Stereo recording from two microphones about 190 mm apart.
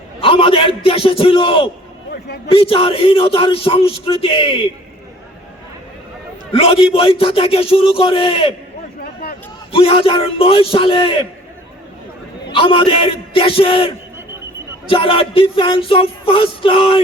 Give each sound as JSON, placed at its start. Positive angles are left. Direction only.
{"t": 0.2, "sound": "speech", "side_deg": 30}
{"t": 6.5, "sound": "speech", "side_deg": 30}
{"t": 9.7, "sound": "speech", "side_deg": 30}
{"t": 12.5, "sound": "speech", "side_deg": 30}